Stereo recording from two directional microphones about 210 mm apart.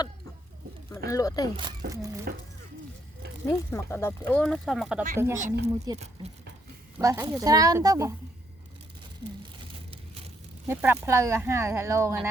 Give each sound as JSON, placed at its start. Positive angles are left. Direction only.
{"t": 0.9, "sound": "speech", "side_deg": 15}
{"t": 2.3, "sound": "speech", "side_deg": -45}
{"t": 3.4, "sound": "speech", "side_deg": 10}
{"t": 7.0, "sound": "speech", "side_deg": -15}
{"t": 10.7, "sound": "speech", "side_deg": -10}